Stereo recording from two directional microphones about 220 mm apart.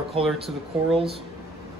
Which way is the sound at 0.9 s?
25° right (ahead or behind).